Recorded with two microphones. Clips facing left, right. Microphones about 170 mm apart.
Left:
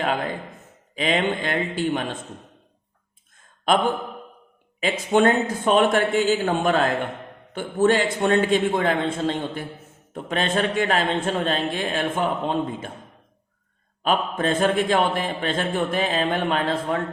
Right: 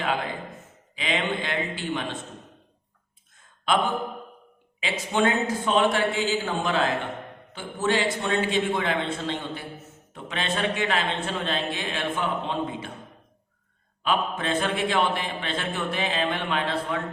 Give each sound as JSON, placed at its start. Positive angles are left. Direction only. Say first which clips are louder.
{"t": 0.9, "sound": "speech", "louder": "left 5 dB", "side_deg": 45}
{"t": 4.8, "sound": "speech", "louder": "left 6 dB", "side_deg": 50}
{"t": 14.0, "sound": "speech", "louder": "left 4 dB", "side_deg": 45}